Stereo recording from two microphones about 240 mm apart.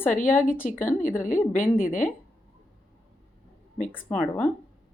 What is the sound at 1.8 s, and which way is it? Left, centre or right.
Speech, left.